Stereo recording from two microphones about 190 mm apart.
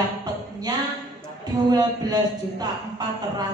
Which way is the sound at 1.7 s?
20° right (ahead or behind).